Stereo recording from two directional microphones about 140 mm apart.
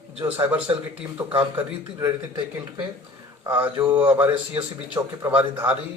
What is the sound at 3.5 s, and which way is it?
Speech, 15° right (ahead or behind).